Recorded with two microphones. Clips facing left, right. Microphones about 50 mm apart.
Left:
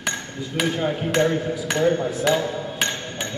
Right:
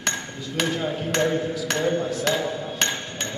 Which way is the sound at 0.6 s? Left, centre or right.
Centre.